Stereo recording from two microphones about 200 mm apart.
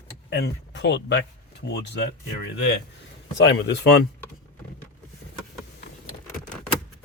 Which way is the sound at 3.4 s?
60° left (ahead or behind).